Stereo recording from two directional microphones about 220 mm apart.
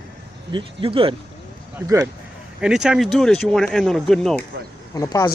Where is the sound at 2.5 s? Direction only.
5° right (ahead or behind).